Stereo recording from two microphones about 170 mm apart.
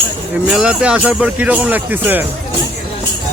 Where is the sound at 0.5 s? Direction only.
5° right (ahead or behind).